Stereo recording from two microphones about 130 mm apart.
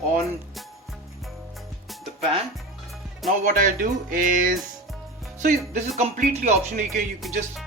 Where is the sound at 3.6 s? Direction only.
90° right.